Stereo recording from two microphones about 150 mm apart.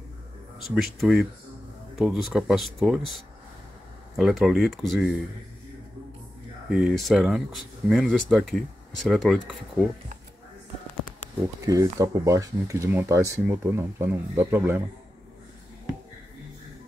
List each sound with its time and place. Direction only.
0.7 s speech: centre (ahead or behind)
4.2 s speech: centre (ahead or behind)
6.7 s speech: 5° right (ahead or behind)
11.6 s speech: 25° right (ahead or behind)